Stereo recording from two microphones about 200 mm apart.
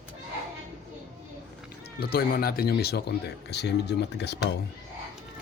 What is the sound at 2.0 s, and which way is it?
Speech, 50° left (ahead or behind).